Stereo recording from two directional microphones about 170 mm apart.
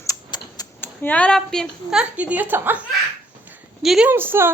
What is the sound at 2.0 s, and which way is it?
Speech, 10° right (ahead or behind).